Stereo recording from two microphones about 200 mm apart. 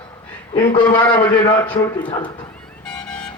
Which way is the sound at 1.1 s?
25° left (ahead or behind).